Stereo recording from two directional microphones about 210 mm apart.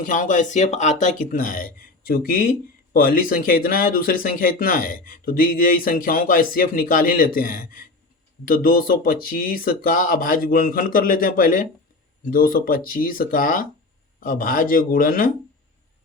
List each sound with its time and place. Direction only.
0.0 s speech: 40° left (ahead or behind)